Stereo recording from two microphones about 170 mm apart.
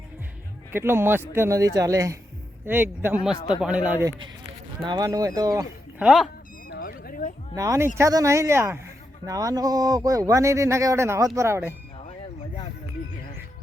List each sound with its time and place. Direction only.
0.7 s speech: 15° right (ahead or behind)
4.9 s speech: 20° right (ahead or behind)
6.0 s speech: 5° right (ahead or behind)
6.7 s a sound: 60° left (ahead or behind)
7.5 s speech: 20° right (ahead or behind)